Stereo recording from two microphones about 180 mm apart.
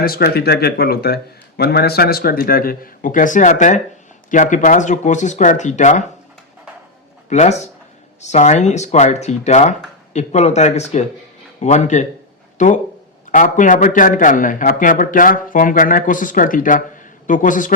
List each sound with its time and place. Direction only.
0.0 s a man's voice: 55° left (ahead or behind); by 6.1 s 40° left (ahead or behind)
7.3 s a man's voice: 40° left (ahead or behind)